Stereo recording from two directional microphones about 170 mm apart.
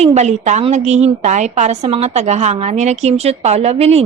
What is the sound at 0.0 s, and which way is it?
Speech, 40° right (ahead or behind).